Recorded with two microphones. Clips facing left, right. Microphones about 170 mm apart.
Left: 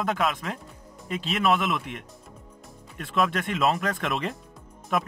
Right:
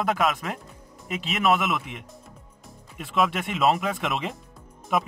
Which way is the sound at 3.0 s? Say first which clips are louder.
Right 1 dB; 10° right (ahead or behind).